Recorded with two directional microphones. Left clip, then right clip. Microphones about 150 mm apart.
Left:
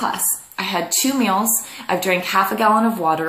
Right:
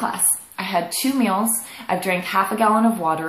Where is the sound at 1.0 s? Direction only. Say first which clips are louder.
Left 2 dB; 25° left (ahead or behind).